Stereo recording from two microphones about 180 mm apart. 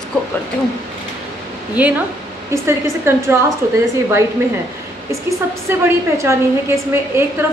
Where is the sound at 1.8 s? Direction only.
10° right (ahead or behind).